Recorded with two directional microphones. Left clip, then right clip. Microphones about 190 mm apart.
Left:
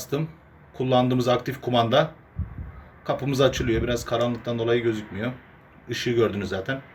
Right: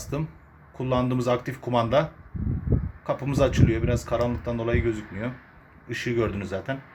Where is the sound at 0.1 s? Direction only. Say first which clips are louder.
Left 4 dB; 15° right (ahead or behind).